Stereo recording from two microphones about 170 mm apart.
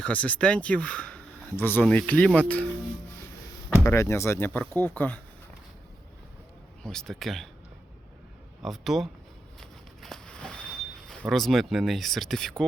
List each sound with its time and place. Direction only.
0.0 s speech: 10° left (ahead or behind)
3.8 s speech: 15° left (ahead or behind)
6.8 s speech: 5° left (ahead or behind)
8.6 s speech: centre (ahead or behind)
9.6 s a sound: 5° left (ahead or behind)